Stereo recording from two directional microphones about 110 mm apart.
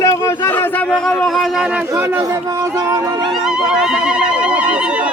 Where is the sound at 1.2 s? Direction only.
5° left (ahead or behind).